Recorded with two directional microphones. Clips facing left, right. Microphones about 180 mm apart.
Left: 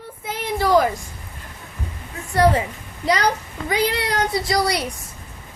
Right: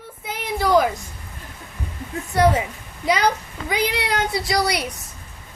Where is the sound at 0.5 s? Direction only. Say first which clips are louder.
Even; centre (ahead or behind).